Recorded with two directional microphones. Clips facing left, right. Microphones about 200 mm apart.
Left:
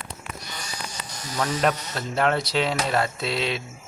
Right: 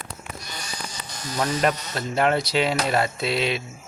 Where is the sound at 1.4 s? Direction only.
5° right (ahead or behind).